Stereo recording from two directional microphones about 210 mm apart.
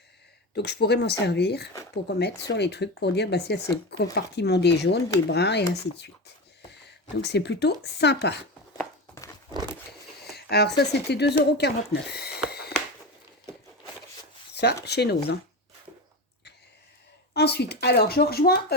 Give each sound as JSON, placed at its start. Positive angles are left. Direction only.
{"t": 0.5, "sound": "speech", "side_deg": 55}
{"t": 10.2, "sound": "speech", "side_deg": 50}
{"t": 12.5, "sound": "a sound", "side_deg": 50}
{"t": 14.5, "sound": "a sound", "side_deg": 50}
{"t": 14.8, "sound": "speech", "side_deg": 50}
{"t": 17.3, "sound": "speech", "side_deg": 50}